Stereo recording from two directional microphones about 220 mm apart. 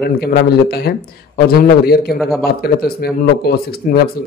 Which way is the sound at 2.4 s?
45° left (ahead or behind).